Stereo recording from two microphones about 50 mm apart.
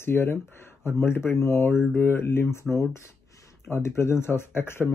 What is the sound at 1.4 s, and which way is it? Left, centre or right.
Speech, left.